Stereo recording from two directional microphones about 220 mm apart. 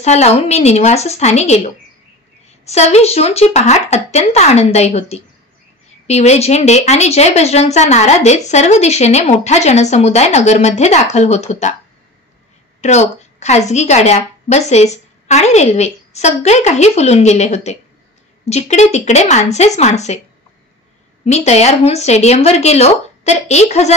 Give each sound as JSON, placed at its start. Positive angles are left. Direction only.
{"t": 0.0, "sound": "speech", "side_deg": 30}
{"t": 12.8, "sound": "a woman's voice", "side_deg": 30}
{"t": 21.2, "sound": "speech", "side_deg": 30}